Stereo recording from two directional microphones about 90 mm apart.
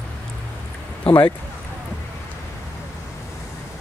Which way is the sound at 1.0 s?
65° left (ahead or behind).